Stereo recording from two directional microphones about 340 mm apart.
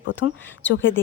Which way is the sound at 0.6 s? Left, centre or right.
Centre.